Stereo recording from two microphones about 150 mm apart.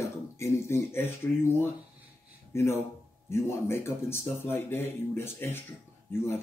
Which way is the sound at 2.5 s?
20° left (ahead or behind).